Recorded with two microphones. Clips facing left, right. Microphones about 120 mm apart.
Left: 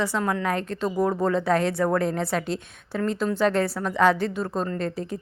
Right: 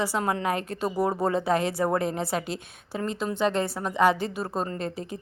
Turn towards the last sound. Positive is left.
turn(degrees=-5)  # may be behind; listen again after turning